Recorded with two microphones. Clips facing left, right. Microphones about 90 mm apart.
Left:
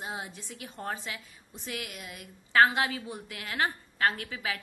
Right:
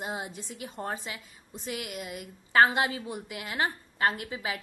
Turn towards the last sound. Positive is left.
turn(degrees=-25)  # may be behind; listen again after turning